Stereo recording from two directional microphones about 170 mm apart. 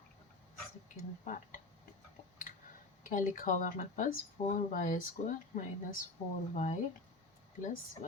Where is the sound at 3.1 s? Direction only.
50° left (ahead or behind).